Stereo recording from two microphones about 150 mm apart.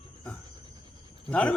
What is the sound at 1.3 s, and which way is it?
Speech, 5° left (ahead or behind).